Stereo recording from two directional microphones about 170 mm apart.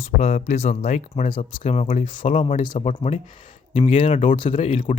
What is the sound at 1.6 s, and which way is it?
Speech, 40° left (ahead or behind).